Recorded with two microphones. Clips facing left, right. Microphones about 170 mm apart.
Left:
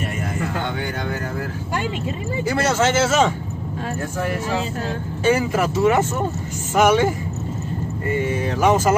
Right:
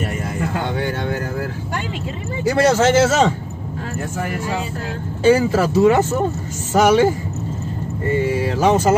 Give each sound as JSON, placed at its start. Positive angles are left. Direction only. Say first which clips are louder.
{"t": 2.5, "sound": "a man's voice", "louder": "right 5 dB", "side_deg": -35}
{"t": 5.2, "sound": "a man's voice", "louder": "right 4 dB", "side_deg": -30}
{"t": 8.5, "sound": "speech", "louder": "right 1 dB", "side_deg": -30}